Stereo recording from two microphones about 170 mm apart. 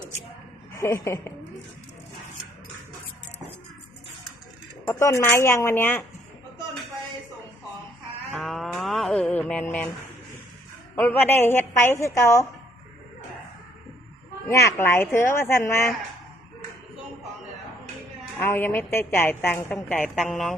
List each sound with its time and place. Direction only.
0.7 s a woman's voice: 15° left (ahead or behind)
4.9 s a woman's voice: 20° left (ahead or behind)
8.3 s a sound: centre (ahead or behind)
10.9 s a woman's voice: 15° left (ahead or behind)
14.4 s a woman's voice: 20° left (ahead or behind)
18.3 s a woman's voice: 15° left (ahead or behind)